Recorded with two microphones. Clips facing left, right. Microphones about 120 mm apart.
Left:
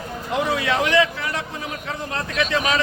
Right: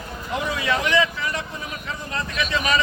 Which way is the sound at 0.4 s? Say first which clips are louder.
Left 1 dB; 65° left (ahead or behind).